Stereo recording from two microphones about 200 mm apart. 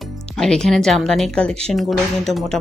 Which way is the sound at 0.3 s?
5° left (ahead or behind).